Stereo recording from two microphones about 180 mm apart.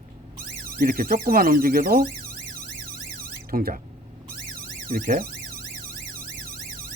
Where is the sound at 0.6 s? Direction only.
55° right (ahead or behind).